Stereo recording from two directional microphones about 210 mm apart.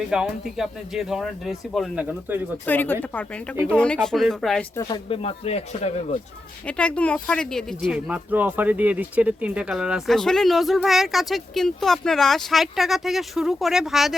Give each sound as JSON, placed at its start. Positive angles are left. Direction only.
{"t": 0.1, "sound": "speech", "side_deg": 0}
{"t": 2.6, "sound": "speech", "side_deg": 10}
{"t": 4.8, "sound": "speech", "side_deg": 20}
{"t": 6.7, "sound": "speech", "side_deg": 5}